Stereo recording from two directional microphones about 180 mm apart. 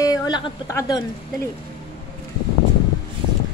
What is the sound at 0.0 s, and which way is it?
Speech, 20° left (ahead or behind).